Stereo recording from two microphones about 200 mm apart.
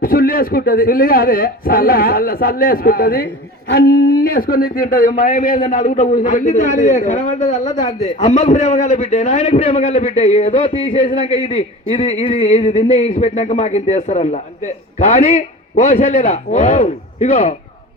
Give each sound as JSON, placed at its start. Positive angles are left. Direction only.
{"t": 0.0, "sound": "a man's voice", "side_deg": 45}